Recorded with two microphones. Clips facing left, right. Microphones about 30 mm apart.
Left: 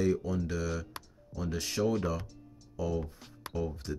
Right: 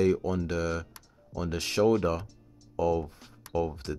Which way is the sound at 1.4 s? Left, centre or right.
Right.